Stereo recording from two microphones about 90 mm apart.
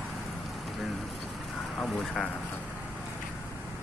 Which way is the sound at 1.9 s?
10° left (ahead or behind).